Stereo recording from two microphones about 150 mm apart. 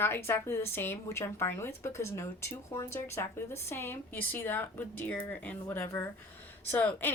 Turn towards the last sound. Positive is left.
turn(degrees=15)  # may be behind; listen again after turning